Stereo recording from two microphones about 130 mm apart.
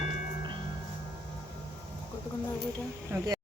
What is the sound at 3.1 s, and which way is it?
Speech, 20° right (ahead or behind).